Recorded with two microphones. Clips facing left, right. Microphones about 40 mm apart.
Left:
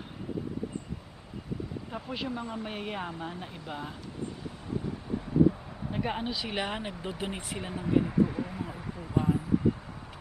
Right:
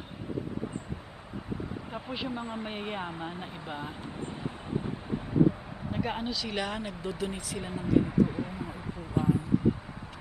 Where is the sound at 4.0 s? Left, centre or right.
Right; by 5.9 s centre.